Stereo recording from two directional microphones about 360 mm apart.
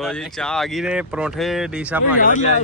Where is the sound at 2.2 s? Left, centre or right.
Left.